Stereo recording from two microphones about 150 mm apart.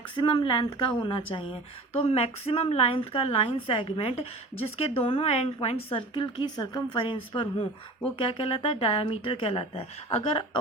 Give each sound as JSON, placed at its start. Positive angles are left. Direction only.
{"t": 0.2, "sound": "speech", "side_deg": 30}